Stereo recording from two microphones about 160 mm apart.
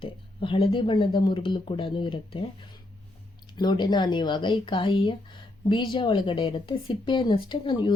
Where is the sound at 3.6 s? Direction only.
25° left (ahead or behind).